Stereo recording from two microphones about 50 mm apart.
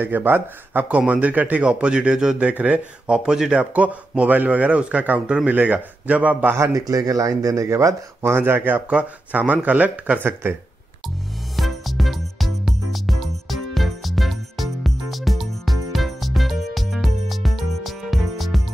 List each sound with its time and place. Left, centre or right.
0.0 s speech: right
0.9 s a man's voice: right
1.6 s a man's voice: centre
2.3 s a man's voice: right
3.1 s speech: centre
3.5 s a man's voice: right
7.2 s speech: right
8.2 s speech: right
8.9 s speech: right
11.5 s music: centre